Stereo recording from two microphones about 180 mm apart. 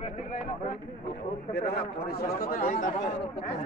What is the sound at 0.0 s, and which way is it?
Speech, 45° left (ahead or behind).